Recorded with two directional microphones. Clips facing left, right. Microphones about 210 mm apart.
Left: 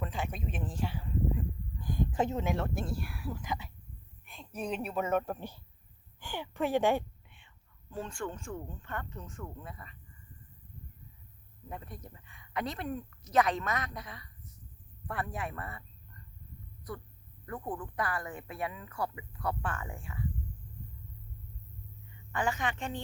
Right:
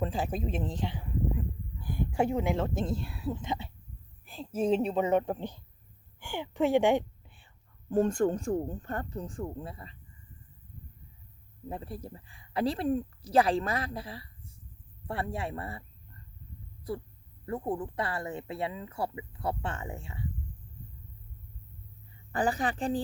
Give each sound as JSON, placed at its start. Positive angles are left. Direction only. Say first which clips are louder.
{"t": 0.0, "sound": "a woman's voice", "louder": "right 6 dB", "side_deg": -30}
{"t": 7.3, "sound": "speech", "louder": "right 2 dB", "side_deg": -35}
{"t": 11.7, "sound": "speech", "louder": "right 6 dB", "side_deg": -30}
{"t": 16.9, "sound": "speech", "louder": "right 7 dB", "side_deg": -25}
{"t": 22.3, "sound": "speech", "louder": "right 4 dB", "side_deg": -35}